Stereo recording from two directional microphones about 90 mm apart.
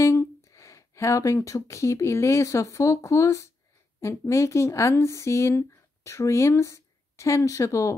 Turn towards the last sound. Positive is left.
turn(degrees=35)  # may be behind; listen again after turning